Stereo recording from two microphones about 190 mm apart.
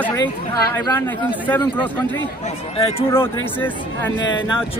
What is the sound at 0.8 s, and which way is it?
Speech, 15° left (ahead or behind).